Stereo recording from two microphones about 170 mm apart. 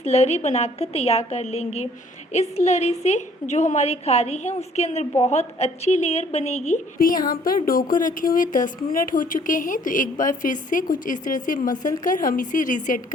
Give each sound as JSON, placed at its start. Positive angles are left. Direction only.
{"t": 0.0, "sound": "a woman's voice", "side_deg": 40}
{"t": 7.0, "sound": "a woman's voice", "side_deg": 55}